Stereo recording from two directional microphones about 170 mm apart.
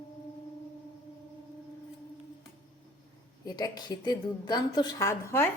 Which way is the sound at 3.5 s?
20° left (ahead or behind).